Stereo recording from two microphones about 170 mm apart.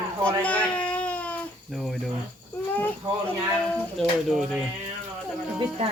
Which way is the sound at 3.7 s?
Centre (ahead or behind).